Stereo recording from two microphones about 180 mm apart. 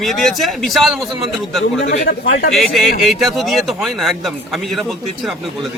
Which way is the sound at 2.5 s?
Centre (ahead or behind).